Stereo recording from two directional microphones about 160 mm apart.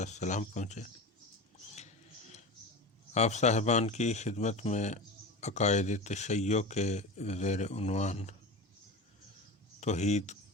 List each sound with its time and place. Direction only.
0.0 s speech: 45° left (ahead or behind)
3.2 s speech: 45° left (ahead or behind)
9.8 s speech: 45° left (ahead or behind)